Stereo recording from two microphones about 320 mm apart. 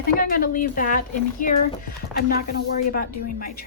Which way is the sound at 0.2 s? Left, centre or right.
Left.